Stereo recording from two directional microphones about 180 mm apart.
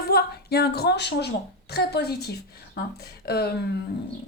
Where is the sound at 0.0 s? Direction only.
60° left (ahead or behind).